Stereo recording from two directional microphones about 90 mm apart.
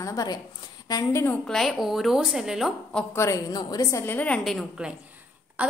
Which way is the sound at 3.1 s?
35° left (ahead or behind).